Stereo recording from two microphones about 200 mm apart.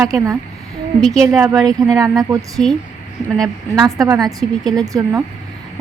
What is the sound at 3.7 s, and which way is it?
A woman's voice, 15° right (ahead or behind).